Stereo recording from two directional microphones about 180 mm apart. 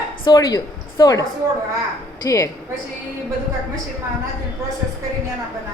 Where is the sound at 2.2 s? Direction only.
20° left (ahead or behind).